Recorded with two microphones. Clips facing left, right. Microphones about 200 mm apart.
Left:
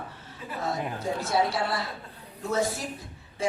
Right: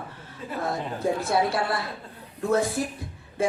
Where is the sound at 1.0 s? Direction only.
55° right (ahead or behind).